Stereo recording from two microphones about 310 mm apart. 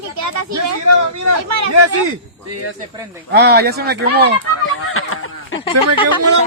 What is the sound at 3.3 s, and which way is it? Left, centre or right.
Speech, right.